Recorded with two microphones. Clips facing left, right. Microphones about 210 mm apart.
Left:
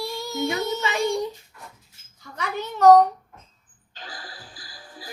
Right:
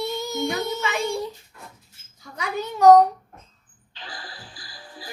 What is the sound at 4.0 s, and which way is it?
Music, 45° left (ahead or behind).